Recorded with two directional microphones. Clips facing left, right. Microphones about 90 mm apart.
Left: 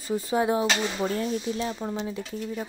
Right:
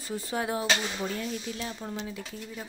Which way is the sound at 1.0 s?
35° left (ahead or behind).